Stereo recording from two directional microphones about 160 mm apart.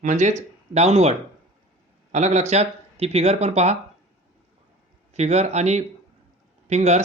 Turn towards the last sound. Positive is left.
turn(degrees=-45)  # may be behind; listen again after turning